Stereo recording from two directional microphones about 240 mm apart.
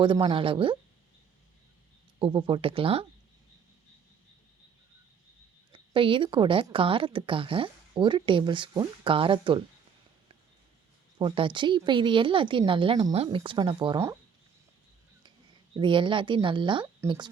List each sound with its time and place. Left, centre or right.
0.0 s speech: right
2.1 s speech: right
5.7 s speech: right
11.2 s speech: right
15.7 s speech: centre